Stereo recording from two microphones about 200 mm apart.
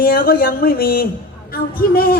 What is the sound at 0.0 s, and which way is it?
Speech, 45° left (ahead or behind).